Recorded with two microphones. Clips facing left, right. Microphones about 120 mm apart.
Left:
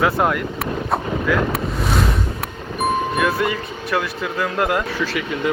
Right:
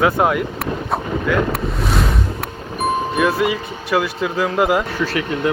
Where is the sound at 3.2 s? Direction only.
Centre (ahead or behind).